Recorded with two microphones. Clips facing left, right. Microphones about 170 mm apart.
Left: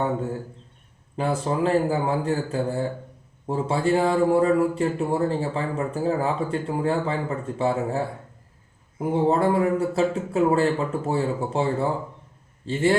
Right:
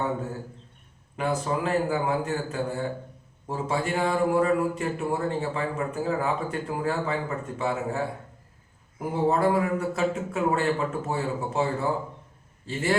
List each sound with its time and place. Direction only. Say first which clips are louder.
1.1 s a man's voice: left 2 dB; 30° left (ahead or behind)